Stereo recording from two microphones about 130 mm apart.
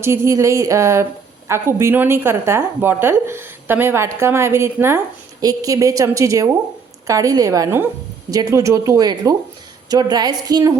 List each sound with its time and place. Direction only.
0.0 s a woman's voice: 20° right (ahead or behind)